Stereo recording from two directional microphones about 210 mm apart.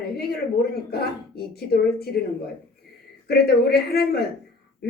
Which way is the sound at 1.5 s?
50° left (ahead or behind).